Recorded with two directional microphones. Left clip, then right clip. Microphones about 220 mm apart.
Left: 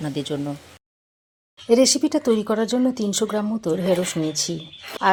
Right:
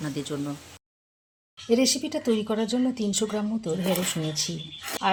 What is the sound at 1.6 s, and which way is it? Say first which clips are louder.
A woman's voice: left 7 dB; 30° left (ahead or behind).